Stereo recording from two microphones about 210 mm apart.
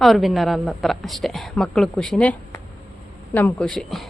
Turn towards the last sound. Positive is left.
turn(degrees=0)  # may be behind; listen again after turning